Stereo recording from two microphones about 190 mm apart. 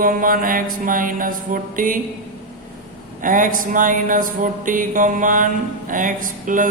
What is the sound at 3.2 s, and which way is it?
Mantra, 45° right (ahead or behind).